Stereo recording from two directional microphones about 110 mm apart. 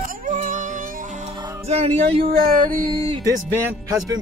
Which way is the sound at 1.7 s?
70° right (ahead or behind).